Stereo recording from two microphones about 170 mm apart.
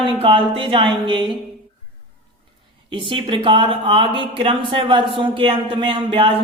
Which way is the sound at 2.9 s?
30° right (ahead or behind).